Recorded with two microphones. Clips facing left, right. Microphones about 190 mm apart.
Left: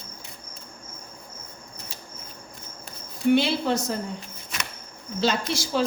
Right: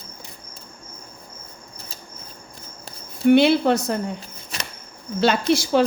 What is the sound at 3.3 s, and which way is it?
Speech, 60° right (ahead or behind).